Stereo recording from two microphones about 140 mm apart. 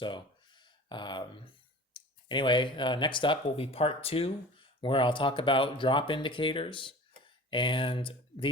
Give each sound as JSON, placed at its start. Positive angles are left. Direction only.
{"t": 0.0, "sound": "speech", "side_deg": 35}